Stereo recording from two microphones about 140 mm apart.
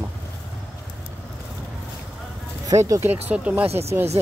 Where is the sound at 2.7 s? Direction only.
25° right (ahead or behind).